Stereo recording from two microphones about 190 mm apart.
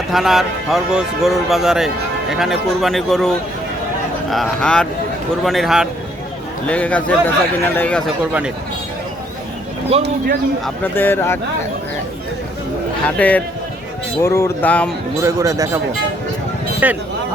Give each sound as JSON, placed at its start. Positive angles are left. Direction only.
{"t": 0.1, "sound": "a man's voice", "side_deg": 0}
{"t": 8.2, "sound": "speech", "side_deg": -5}
{"t": 9.9, "sound": "speech", "side_deg": -30}
{"t": 10.9, "sound": "a man's voice", "side_deg": 10}
{"t": 13.1, "sound": "a man's voice", "side_deg": 10}
{"t": 15.2, "sound": "speech", "side_deg": -15}
{"t": 16.8, "sound": "speech", "side_deg": -10}